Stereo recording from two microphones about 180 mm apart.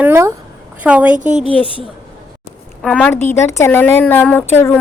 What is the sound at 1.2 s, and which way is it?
Speech, 40° right (ahead or behind).